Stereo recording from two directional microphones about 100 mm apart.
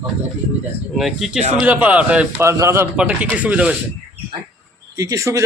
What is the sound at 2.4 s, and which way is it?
Speech, 30° right (ahead or behind).